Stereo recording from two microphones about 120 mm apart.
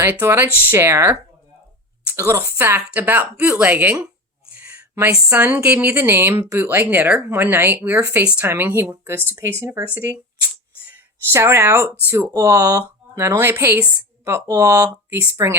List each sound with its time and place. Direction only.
0.0 s a woman's voice: 20° right (ahead or behind)
14.5 s a woman's voice: 25° right (ahead or behind)